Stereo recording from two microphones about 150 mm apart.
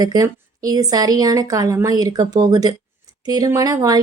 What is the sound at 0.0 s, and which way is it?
A woman's voice, 25° right (ahead or behind).